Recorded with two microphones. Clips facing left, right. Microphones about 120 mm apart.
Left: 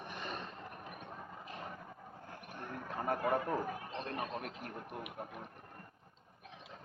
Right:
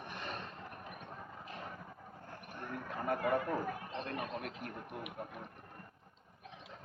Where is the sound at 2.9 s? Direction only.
30° left (ahead or behind).